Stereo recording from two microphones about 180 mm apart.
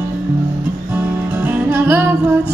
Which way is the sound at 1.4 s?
10° right (ahead or behind).